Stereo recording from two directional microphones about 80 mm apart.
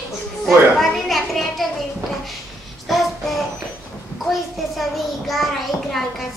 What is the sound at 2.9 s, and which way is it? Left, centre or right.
Child singing, centre.